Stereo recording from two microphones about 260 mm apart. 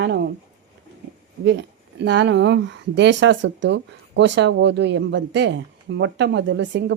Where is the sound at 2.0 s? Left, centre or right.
Right.